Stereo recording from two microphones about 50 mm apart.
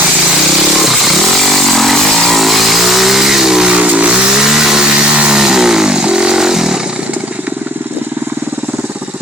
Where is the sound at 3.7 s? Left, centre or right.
Right.